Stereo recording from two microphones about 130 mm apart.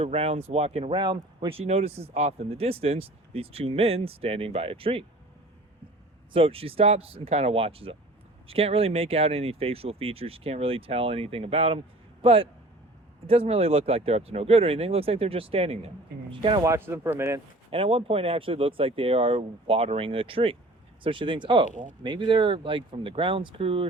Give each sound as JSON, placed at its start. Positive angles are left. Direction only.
{"t": 0.0, "sound": "speech", "side_deg": -50}
{"t": 1.0, "sound": "speech", "side_deg": -35}
{"t": 6.3, "sound": "speech", "side_deg": -45}
{"t": 16.3, "sound": "speech", "side_deg": -40}
{"t": 16.6, "sound": "speech", "side_deg": -20}
{"t": 17.7, "sound": "speech", "side_deg": -45}